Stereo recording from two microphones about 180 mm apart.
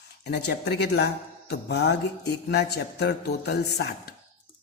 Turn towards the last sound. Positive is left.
turn(degrees=60)  # may be behind; listen again after turning